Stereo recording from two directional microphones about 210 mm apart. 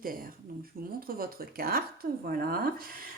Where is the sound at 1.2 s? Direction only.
45° right (ahead or behind).